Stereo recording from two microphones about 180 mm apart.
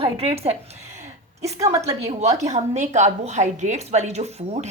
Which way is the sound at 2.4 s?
40° right (ahead or behind).